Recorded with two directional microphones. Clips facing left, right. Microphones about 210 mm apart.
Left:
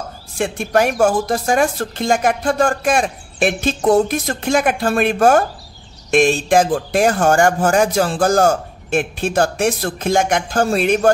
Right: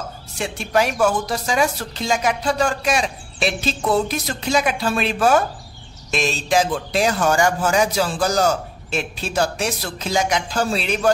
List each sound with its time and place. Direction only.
0.4 s speech: 50° left (ahead or behind)